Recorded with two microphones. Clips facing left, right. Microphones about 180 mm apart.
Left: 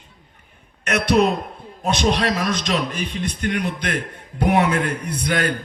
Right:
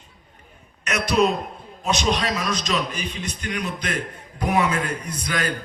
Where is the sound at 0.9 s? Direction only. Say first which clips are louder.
Left 3 dB; 60° left (ahead or behind).